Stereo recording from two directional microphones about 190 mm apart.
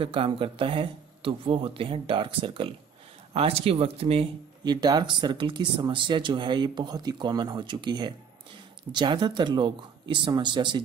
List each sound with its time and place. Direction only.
0.0 s speech: 25° right (ahead or behind)